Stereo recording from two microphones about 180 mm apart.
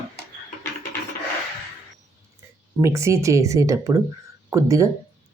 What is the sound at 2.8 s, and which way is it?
Speech, 15° right (ahead or behind).